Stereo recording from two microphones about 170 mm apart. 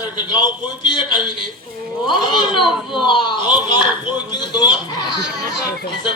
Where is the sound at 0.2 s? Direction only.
25° left (ahead or behind).